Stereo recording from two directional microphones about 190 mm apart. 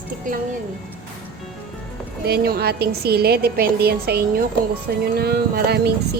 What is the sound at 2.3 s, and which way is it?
A woman's voice, 55° right (ahead or behind).